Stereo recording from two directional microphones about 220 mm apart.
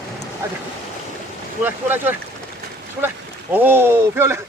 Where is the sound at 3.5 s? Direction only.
10° right (ahead or behind).